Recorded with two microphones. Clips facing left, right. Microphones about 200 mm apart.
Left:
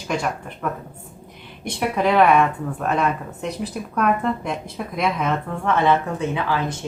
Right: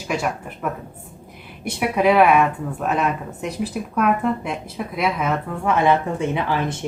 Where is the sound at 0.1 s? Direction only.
5° right (ahead or behind).